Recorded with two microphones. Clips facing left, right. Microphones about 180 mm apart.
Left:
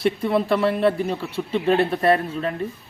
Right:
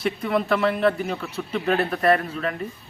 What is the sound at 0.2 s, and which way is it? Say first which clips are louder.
Speech: left 2 dB; 30° left (ahead or behind).